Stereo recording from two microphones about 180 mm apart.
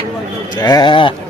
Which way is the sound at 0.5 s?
20° left (ahead or behind).